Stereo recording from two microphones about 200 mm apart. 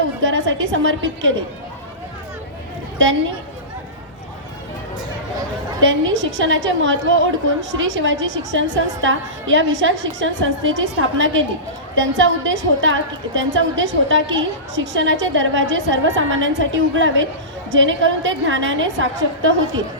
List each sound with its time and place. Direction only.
0.2 s a woman's voice: 70° right (ahead or behind)
5.8 s a woman's voice: 70° right (ahead or behind)